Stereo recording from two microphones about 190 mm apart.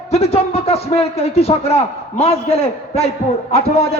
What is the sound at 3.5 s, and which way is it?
Speech, 35° left (ahead or behind).